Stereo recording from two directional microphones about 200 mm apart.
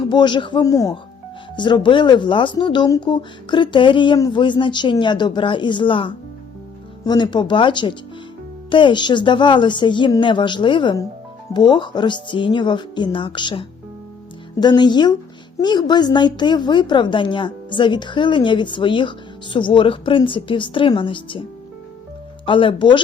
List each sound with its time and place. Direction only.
0.1 s a woman's voice: 25° left (ahead or behind)
22.4 s a woman's voice: 25° left (ahead or behind)